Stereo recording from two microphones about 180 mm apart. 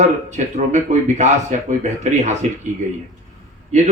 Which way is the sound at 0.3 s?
40° right (ahead or behind).